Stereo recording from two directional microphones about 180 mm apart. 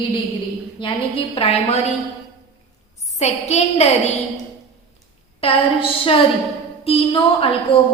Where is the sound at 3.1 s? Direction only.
40° left (ahead or behind).